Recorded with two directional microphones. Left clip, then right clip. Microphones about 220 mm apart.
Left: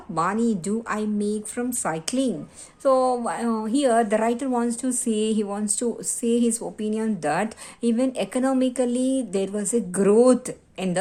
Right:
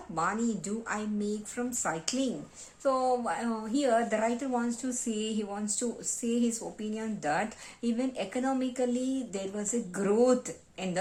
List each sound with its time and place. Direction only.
0.1 s a woman's voice: 40° left (ahead or behind)